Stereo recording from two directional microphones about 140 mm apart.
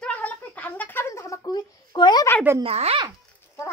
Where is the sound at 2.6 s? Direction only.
45° right (ahead or behind).